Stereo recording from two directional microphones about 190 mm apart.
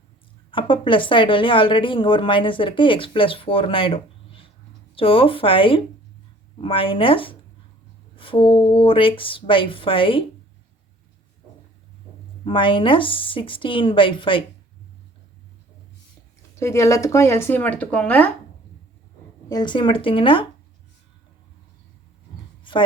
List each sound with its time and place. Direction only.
0.5 s a woman's voice: 25° left (ahead or behind)
12.5 s a woman's voice: 25° left (ahead or behind)
16.6 s speech: 15° left (ahead or behind)
19.5 s a woman's voice: 20° left (ahead or behind)